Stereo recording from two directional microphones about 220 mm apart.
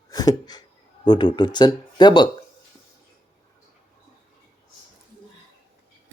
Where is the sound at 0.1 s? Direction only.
15° left (ahead or behind).